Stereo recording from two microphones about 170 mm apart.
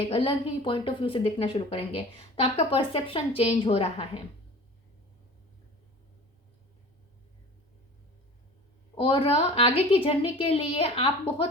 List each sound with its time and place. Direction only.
0.1 s a woman's voice: 30° left (ahead or behind)
9.0 s a woman's voice: 30° left (ahead or behind)